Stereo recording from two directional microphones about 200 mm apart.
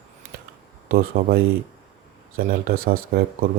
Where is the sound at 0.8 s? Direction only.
45° right (ahead or behind).